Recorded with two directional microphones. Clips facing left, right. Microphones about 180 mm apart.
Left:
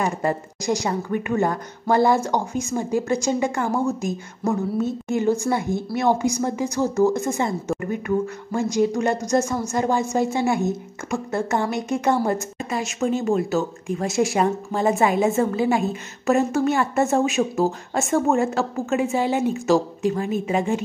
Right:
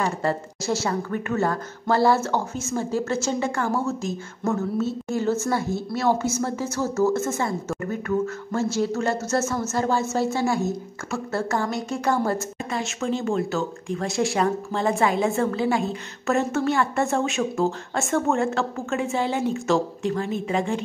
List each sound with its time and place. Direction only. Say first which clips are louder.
0.0 s speech: left 1 dB; 15° left (ahead or behind)